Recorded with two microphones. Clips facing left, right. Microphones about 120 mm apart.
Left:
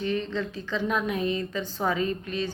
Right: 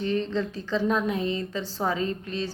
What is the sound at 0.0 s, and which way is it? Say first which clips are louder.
A woman's voice: right 2 dB; 35° right (ahead or behind).